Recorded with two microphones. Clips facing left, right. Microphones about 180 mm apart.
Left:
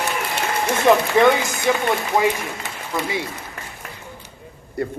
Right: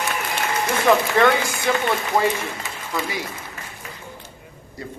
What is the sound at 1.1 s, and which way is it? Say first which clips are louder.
Speech: left 2 dB; 15° left (ahead or behind).